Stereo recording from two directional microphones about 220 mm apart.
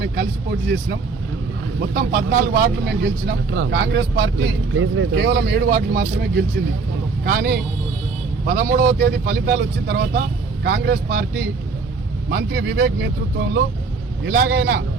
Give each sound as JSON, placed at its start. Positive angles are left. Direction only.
{"t": 1.8, "sound": "speech", "side_deg": -40}